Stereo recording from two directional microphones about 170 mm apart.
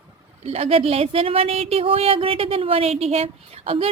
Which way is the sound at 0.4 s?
35° right (ahead or behind).